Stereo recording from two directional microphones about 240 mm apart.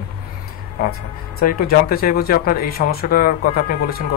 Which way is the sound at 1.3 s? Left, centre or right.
Left.